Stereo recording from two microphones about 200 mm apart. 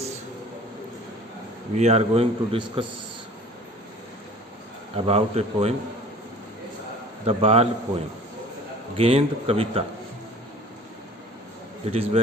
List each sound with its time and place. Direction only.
1.7 s speech: 35° right (ahead or behind)
4.9 s speech: 30° right (ahead or behind)
7.3 s speech: 30° right (ahead or behind)
9.0 s speech: 30° right (ahead or behind)
11.9 s speech: 30° right (ahead or behind)